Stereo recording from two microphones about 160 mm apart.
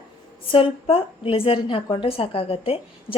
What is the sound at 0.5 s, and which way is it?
A woman's voice, 35° left (ahead or behind).